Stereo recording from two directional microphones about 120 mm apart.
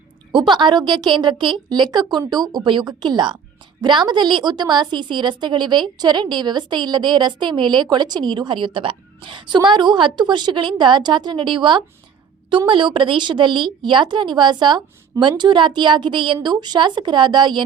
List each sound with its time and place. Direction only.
0.3 s a woman's voice: 40° right (ahead or behind)